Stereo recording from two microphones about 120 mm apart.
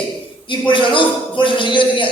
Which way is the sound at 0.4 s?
45° left (ahead or behind).